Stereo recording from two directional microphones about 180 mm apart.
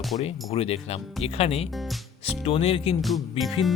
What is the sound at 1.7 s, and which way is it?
Music, centre (ahead or behind).